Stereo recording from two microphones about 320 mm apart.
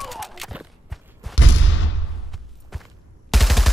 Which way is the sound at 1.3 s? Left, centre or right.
Left.